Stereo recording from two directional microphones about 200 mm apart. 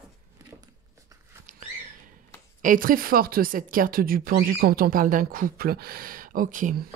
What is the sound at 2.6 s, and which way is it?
Speech, 45° right (ahead or behind).